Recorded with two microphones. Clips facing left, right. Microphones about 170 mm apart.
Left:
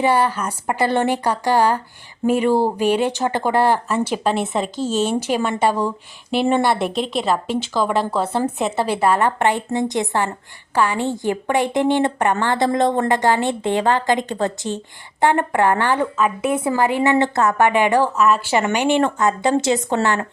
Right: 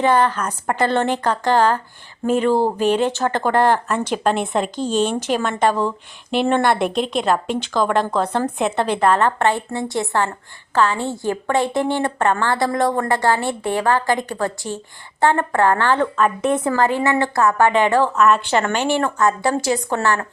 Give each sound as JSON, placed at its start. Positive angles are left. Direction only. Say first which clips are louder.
{"t": 0.0, "sound": "a woman's voice", "louder": "right 1 dB", "side_deg": 10}
{"t": 18.2, "sound": "a woman's voice", "louder": "right 1 dB", "side_deg": 0}